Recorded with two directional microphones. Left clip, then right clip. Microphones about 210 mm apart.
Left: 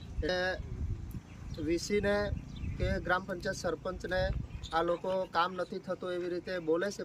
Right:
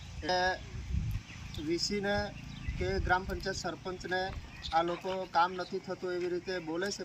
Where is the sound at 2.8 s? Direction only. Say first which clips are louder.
Right 1 dB; 20° left (ahead or behind).